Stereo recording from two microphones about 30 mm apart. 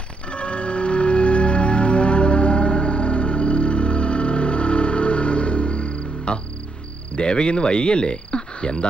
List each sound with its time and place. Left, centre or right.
0.3 s music: left
7.2 s speech: left